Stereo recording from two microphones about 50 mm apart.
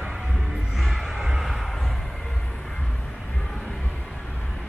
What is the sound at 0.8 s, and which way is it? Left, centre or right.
Music, centre.